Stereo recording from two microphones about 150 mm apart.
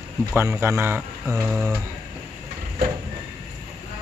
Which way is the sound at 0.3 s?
15° right (ahead or behind).